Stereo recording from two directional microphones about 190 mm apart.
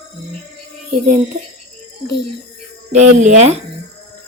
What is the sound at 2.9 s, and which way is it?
Speech, 40° right (ahead or behind).